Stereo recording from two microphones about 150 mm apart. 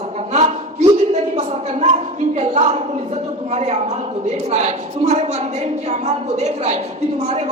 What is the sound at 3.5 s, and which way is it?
A woman's voice, 45° right (ahead or behind).